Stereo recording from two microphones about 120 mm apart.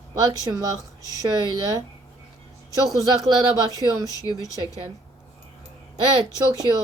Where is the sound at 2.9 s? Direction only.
30° right (ahead or behind).